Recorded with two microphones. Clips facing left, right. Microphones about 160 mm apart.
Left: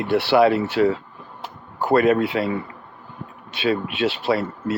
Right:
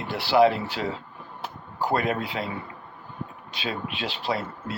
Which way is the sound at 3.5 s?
65° left (ahead or behind).